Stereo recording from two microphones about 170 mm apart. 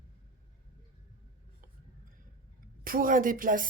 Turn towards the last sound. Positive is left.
turn(degrees=-55)  # may be behind; listen again after turning